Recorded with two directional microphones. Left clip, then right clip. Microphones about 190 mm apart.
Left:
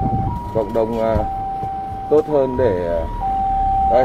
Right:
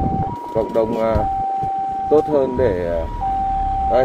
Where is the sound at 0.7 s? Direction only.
15° right (ahead or behind).